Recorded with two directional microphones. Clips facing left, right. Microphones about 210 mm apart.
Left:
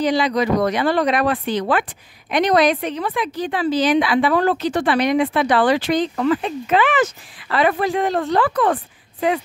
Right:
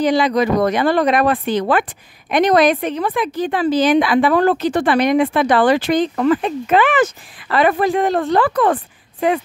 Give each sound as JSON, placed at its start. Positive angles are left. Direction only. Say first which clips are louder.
{"t": 0.0, "sound": "a woman's voice", "louder": "right 3 dB", "side_deg": -50}